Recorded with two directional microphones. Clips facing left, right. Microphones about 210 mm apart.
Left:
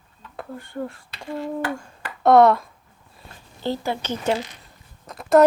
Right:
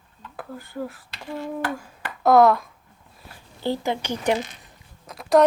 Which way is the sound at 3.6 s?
15° right (ahead or behind).